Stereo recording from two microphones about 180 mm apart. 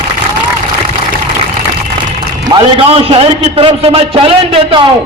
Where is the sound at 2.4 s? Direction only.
25° right (ahead or behind).